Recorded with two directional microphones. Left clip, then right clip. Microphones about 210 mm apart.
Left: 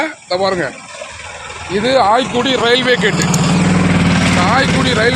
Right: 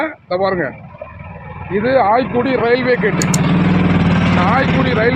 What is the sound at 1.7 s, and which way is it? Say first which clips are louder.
Speech: left 1 dB; 20° left (ahead or behind).